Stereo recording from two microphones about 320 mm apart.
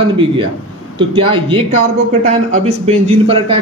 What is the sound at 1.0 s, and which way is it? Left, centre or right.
Speech, centre.